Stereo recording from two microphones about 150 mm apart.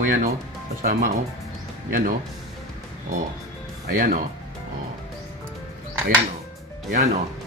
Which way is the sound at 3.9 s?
65° right (ahead or behind).